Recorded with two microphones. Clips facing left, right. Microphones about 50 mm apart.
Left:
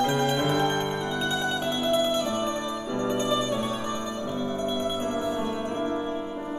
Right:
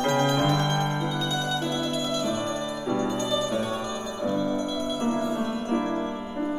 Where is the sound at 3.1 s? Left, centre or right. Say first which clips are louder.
Left 1 dB; left.